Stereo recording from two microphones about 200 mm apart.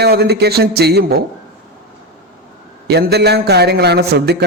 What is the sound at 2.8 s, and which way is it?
A man's voice, 55° right (ahead or behind).